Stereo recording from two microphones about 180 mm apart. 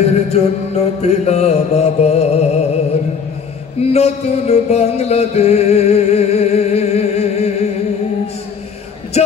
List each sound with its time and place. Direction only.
0.3 s music: 35° left (ahead or behind)
3.9 s music: 35° left (ahead or behind)